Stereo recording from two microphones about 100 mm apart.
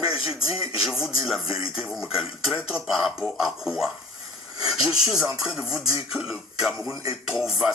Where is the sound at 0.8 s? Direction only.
5° right (ahead or behind).